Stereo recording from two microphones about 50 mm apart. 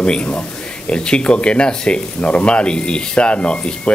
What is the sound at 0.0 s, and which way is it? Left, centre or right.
Speech, left.